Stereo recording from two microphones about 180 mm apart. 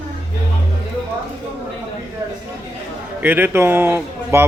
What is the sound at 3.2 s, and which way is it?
Speech, 10° right (ahead or behind).